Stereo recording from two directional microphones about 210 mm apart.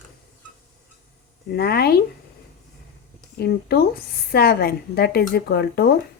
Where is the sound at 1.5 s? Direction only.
50° left (ahead or behind).